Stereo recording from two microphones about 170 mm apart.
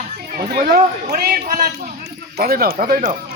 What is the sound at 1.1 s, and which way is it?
Speech, 60° right (ahead or behind).